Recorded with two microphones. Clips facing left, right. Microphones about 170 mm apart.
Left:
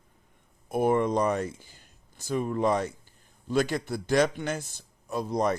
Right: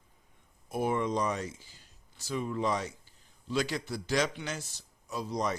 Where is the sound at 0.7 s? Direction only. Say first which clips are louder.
Left 6 dB; 55° left (ahead or behind).